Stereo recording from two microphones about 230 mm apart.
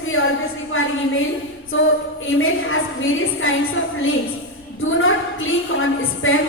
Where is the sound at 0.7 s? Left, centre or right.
Left.